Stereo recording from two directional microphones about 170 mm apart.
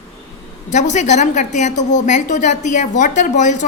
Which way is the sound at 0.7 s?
45° left (ahead or behind).